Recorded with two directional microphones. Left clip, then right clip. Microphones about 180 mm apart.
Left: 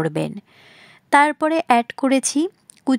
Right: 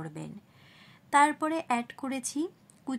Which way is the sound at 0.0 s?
50° left (ahead or behind).